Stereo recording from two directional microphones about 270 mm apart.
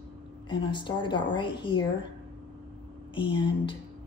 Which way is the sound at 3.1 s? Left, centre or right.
Centre.